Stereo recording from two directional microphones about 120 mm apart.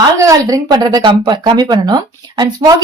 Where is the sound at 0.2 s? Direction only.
25° right (ahead or behind).